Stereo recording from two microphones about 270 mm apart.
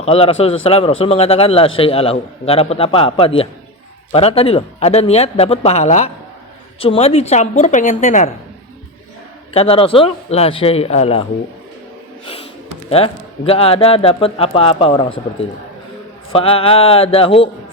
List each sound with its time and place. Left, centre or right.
0.0 s a man's voice: left
9.5 s a man's voice: left
12.9 s a man's voice: left
16.3 s a man's voice: left